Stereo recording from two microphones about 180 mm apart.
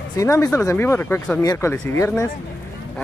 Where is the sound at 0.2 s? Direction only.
20° left (ahead or behind).